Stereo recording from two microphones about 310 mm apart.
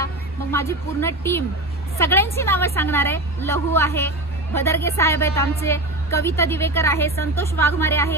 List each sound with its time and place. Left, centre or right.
0.0 s a woman's voice: centre